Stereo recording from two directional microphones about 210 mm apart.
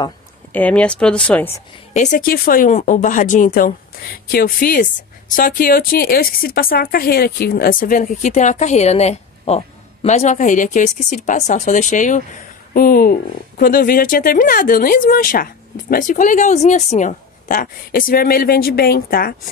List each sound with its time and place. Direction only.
0.5 s a woman's voice: 5° left (ahead or behind)
2.0 s speech: 40° left (ahead or behind)